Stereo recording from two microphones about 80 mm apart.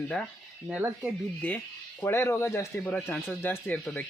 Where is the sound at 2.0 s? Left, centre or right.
Left.